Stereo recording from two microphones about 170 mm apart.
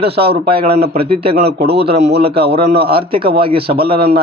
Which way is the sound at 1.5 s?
70° right (ahead or behind).